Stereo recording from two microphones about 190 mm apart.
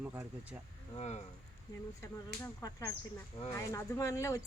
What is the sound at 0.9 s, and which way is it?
Speech, 35° left (ahead or behind).